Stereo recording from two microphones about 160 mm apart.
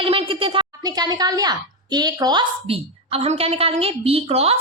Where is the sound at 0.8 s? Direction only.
25° right (ahead or behind).